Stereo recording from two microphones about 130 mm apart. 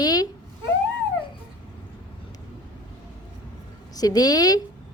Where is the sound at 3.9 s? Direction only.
30° left (ahead or behind).